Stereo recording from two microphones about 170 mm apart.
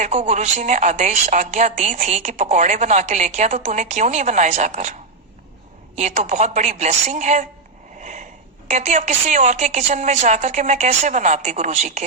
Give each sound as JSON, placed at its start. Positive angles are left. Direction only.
{"t": 0.0, "sound": "a woman's voice", "side_deg": -45}
{"t": 6.0, "sound": "a woman's voice", "side_deg": -45}
{"t": 8.0, "sound": "sniff", "side_deg": -45}
{"t": 8.7, "sound": "a woman's voice", "side_deg": -45}